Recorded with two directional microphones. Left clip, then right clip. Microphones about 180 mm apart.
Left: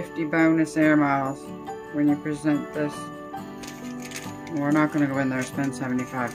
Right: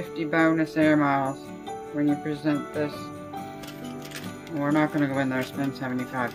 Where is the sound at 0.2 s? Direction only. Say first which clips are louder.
Left 1 dB; 10° left (ahead or behind).